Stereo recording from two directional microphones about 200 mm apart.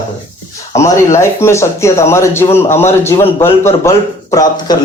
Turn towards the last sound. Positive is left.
turn(degrees=15)  # may be behind; listen again after turning